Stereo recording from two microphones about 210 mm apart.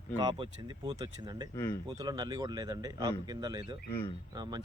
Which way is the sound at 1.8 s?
20° right (ahead or behind).